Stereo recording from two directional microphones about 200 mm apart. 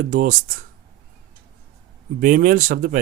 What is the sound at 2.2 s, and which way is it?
Speech, 40° right (ahead or behind).